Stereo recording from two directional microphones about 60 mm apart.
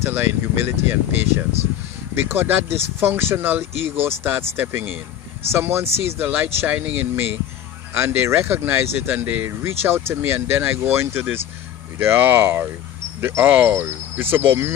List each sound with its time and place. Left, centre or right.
0.0 s speech: right
7.9 s speech: right
9.5 s speech: right
13.4 s speech: right